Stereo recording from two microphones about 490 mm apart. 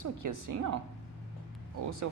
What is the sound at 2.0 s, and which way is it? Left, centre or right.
Speech, right.